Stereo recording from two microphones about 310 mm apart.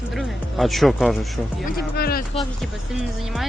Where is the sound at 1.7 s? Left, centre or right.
Left.